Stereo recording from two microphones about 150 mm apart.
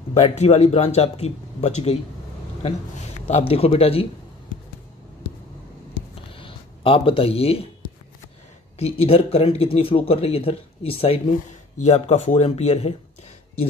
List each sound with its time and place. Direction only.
0.2 s speech: 45° left (ahead or behind)
3.2 s speech: 50° left (ahead or behind)
6.1 s a sound: 35° left (ahead or behind)
8.7 s speech: 40° left (ahead or behind)